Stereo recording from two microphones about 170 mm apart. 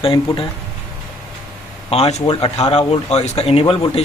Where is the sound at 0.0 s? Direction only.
35° left (ahead or behind).